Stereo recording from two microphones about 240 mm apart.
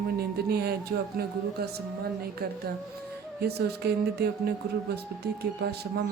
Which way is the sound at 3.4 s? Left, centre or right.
Right.